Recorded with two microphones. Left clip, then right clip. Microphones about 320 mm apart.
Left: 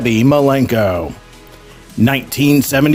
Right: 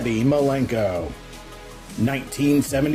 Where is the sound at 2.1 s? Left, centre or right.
Left.